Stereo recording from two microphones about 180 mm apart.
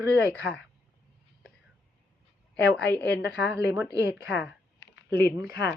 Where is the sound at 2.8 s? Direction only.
80° left.